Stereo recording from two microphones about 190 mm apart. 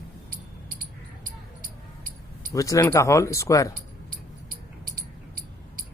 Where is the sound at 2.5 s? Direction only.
15° left (ahead or behind).